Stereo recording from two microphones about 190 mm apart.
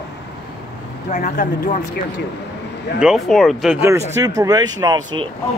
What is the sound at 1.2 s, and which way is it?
Speech, 45° left (ahead or behind).